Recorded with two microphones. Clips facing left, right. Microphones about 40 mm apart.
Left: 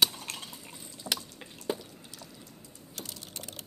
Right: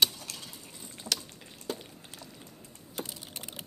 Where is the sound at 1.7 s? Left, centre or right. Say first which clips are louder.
Left 4 dB; centre.